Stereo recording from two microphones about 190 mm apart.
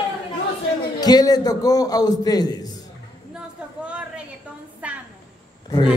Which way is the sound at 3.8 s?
5° right (ahead or behind).